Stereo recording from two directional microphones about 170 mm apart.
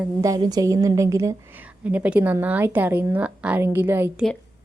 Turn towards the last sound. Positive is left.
turn(degrees=-10)  # may be behind; listen again after turning